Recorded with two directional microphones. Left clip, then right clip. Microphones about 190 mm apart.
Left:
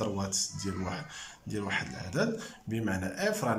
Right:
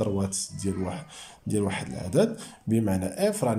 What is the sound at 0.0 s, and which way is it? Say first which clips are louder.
Speech: right 4 dB; 15° right (ahead or behind).